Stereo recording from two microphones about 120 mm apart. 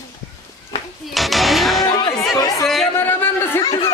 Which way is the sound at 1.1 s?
Centre (ahead or behind).